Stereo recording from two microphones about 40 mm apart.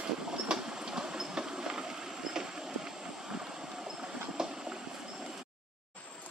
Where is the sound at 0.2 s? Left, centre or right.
Centre.